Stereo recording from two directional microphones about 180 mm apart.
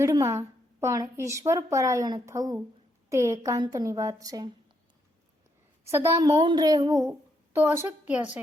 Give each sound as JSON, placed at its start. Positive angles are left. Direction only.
{"t": 0.0, "sound": "a woman's voice", "side_deg": -15}
{"t": 5.8, "sound": "a woman's voice", "side_deg": -15}